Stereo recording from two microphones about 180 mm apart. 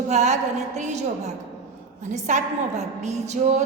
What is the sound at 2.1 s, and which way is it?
A woman's voice, 45° right (ahead or behind).